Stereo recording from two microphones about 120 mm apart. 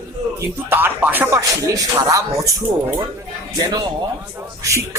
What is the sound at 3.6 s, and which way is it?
Speech, 40° right (ahead or behind).